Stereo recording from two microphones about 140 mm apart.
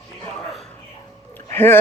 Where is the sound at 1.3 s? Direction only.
15° left (ahead or behind).